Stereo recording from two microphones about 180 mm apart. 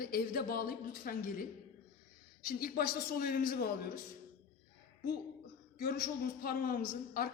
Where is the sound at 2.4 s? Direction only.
55° left (ahead or behind).